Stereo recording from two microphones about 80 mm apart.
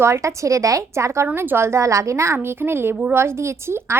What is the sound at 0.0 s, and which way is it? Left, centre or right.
A woman's voice, right.